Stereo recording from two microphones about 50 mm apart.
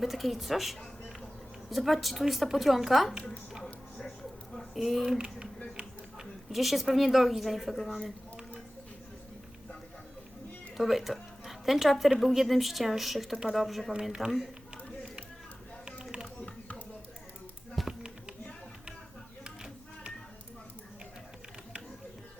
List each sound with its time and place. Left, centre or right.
0.0 s a woman's voice: centre
4.5 s a sound: centre
5.1 s speech: centre
6.5 s a woman's voice: centre
10.8 s a woman's voice: centre
17.8 s music: centre
19.5 s a sound: centre